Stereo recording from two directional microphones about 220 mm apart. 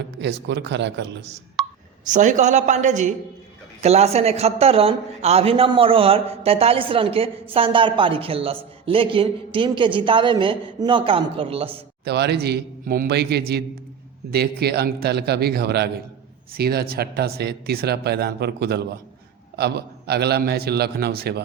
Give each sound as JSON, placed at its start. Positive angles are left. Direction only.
{"t": 0.2, "sound": "speech", "side_deg": -55}
{"t": 1.6, "sound": "a sound", "side_deg": 0}
{"t": 2.0, "sound": "a woman's voice", "side_deg": -35}
{"t": 12.0, "sound": "speech", "side_deg": -50}